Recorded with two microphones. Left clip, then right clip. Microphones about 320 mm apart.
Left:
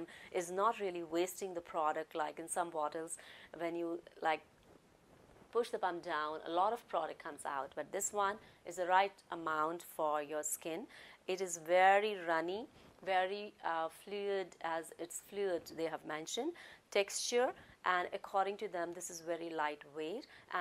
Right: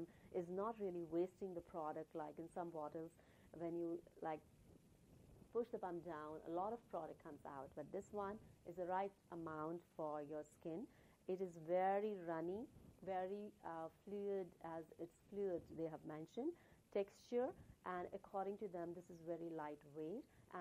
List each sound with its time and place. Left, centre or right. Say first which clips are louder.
0.0 s a woman's voice: left 8 dB; centre
5.5 s a woman's voice: left 10 dB; centre